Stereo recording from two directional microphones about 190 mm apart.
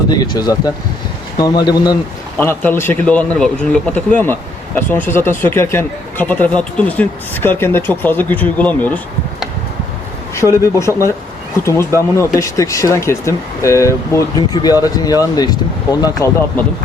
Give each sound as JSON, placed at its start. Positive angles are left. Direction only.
{"t": 0.1, "sound": "speech", "side_deg": 20}
{"t": 2.4, "sound": "a man's voice", "side_deg": 10}
{"t": 10.3, "sound": "a man's voice", "side_deg": 15}